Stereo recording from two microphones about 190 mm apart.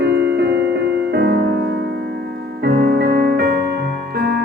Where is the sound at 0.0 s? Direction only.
60° right (ahead or behind).